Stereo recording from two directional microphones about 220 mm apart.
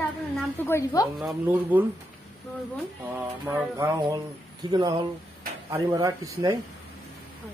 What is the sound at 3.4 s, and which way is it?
Music, 10° right (ahead or behind).